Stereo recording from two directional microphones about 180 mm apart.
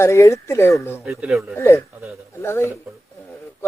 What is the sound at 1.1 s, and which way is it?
Speech, 5° right (ahead or behind).